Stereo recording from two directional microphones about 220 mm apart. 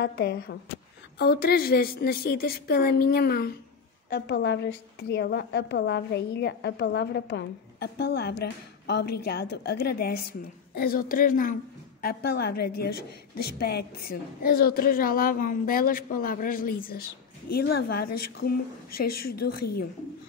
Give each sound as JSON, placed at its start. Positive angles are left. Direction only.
{"t": 0.0, "sound": "a woman's voice", "side_deg": 45}